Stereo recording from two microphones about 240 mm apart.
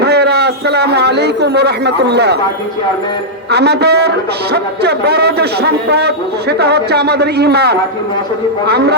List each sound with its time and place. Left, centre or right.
0.0 s a man's voice: right
3.5 s speech: right